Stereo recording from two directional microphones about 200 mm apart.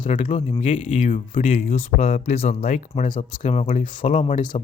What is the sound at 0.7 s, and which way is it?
Speech, 40° left (ahead or behind).